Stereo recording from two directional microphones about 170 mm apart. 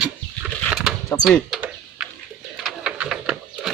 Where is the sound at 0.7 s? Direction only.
Centre (ahead or behind).